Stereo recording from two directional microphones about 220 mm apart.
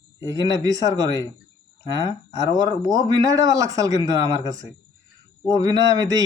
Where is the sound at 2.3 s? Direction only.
15° right (ahead or behind).